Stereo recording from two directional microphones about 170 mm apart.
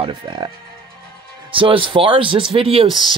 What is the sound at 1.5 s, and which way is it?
Speech, 30° right (ahead or behind).